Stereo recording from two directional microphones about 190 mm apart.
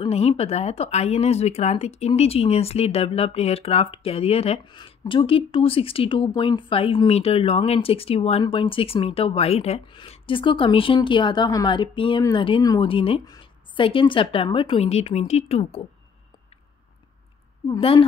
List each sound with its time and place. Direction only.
0.0 s speech: 30° left (ahead or behind)
17.6 s speech: 25° left (ahead or behind)